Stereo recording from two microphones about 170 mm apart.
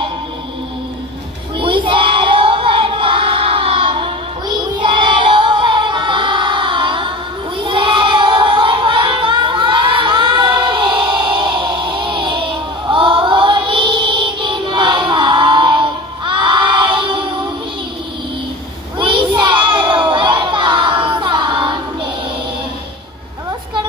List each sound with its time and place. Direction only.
1.6 s child singing: 30° right (ahead or behind)
7.6 s singing: 30° right (ahead or behind)
16.3 s crowd: 30° right (ahead or behind)
18.9 s a sound: 30° right (ahead or behind)